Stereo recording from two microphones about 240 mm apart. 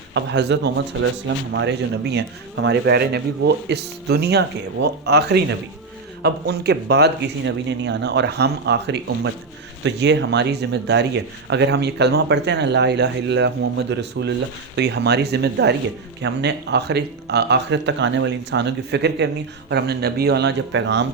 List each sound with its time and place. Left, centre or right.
0.1 s speech: right